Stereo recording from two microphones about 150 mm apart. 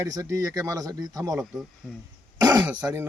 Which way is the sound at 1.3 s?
Centre (ahead or behind).